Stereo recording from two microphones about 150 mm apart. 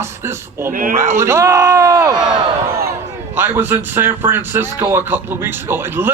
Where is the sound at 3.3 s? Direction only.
15° right (ahead or behind).